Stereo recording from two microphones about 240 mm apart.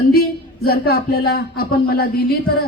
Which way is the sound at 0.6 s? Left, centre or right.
Left.